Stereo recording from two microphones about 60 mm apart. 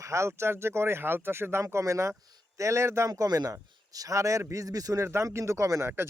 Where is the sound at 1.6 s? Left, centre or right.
Right.